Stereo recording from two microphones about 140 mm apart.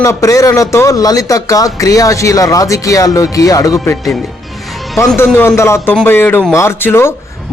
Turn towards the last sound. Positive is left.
turn(degrees=20)  # may be behind; listen again after turning